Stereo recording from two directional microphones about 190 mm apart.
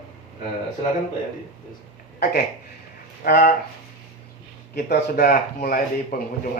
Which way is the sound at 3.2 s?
45° left (ahead or behind).